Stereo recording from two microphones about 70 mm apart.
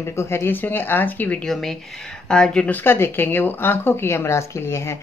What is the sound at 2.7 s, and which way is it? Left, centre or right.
Speech, left.